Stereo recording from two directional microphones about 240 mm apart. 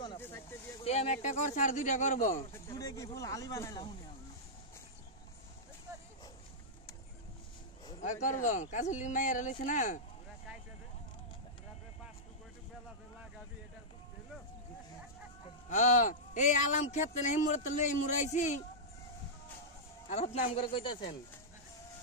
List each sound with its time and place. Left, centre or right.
0.0 s a sound: centre
0.8 s speech: left
2.5 s speech: centre
8.0 s speech: left
15.7 s speech: left
20.3 s speech: left